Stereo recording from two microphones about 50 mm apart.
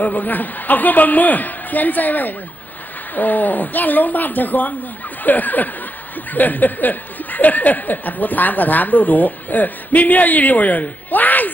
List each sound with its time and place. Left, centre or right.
0.0 s speech: left